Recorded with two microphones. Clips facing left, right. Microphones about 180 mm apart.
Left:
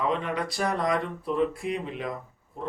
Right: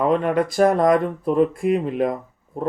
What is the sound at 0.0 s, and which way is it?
Speech, 50° right (ahead or behind).